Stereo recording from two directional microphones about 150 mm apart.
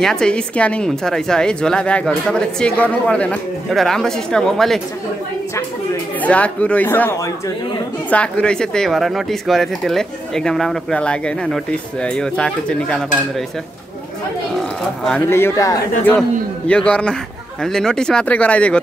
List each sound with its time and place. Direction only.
0.0 s speech: 5° left (ahead or behind)
6.2 s speech: 10° left (ahead or behind)
15.0 s speech: 10° left (ahead or behind)
16.1 s speech: 10° left (ahead or behind)